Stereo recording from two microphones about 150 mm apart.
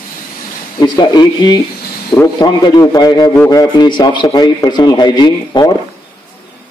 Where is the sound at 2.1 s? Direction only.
15° left (ahead or behind).